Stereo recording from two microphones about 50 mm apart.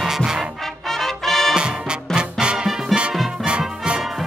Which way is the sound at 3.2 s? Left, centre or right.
Centre.